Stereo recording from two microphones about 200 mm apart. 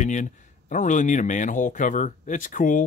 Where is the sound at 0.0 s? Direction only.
40° left (ahead or behind).